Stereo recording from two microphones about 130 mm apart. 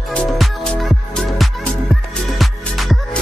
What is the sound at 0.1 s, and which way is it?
Music, centre (ahead or behind).